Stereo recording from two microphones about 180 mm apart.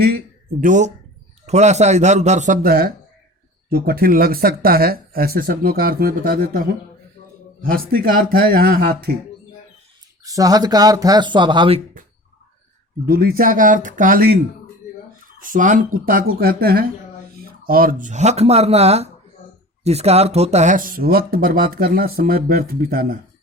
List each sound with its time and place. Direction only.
0.6 s speech: 45° right (ahead or behind)
7.7 s speech: 55° right (ahead or behind)
10.2 s speech: 20° right (ahead or behind)
13.1 s speech: 55° right (ahead or behind)
15.4 s speech: 50° right (ahead or behind)